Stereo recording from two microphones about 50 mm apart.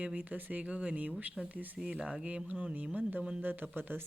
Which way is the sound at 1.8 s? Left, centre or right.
Right.